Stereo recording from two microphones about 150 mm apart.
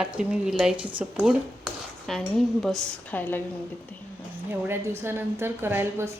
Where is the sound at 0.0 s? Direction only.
5° right (ahead or behind); by 3.4 s 10° left (ahead or behind).